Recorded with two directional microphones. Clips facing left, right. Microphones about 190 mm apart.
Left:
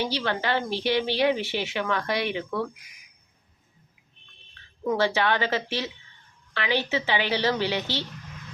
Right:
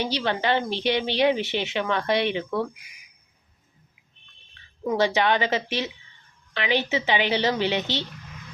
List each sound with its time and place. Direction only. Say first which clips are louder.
0.0 s a woman's voice: right 2 dB; 20° right (ahead or behind)
4.8 s a woman's voice: right 2 dB; 15° right (ahead or behind)